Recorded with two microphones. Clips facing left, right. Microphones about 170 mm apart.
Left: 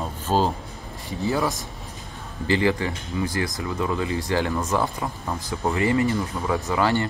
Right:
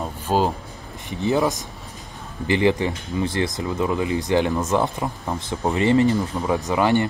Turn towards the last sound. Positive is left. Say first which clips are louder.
# right 3 dB
turn(degrees=-20)  # may be behind; listen again after turning